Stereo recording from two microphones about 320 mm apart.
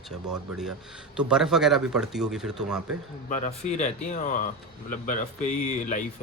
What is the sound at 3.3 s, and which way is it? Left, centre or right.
Speech, left.